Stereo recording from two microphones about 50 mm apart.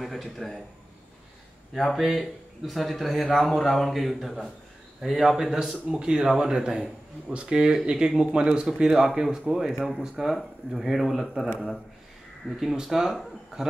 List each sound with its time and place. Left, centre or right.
0.0 s speech: centre
1.8 s speech: centre
12.5 s speech: centre